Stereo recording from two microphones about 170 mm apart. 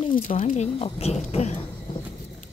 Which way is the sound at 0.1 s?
55° left (ahead or behind).